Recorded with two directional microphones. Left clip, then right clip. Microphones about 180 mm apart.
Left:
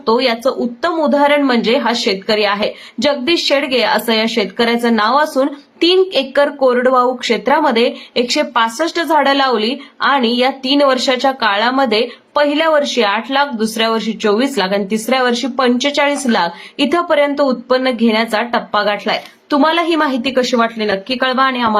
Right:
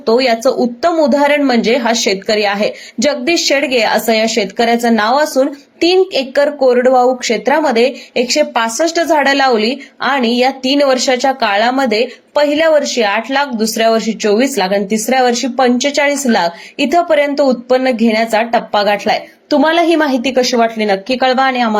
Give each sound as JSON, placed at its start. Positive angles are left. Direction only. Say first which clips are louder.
{"t": 0.0, "sound": "a woman's voice", "louder": "right 3 dB", "side_deg": -10}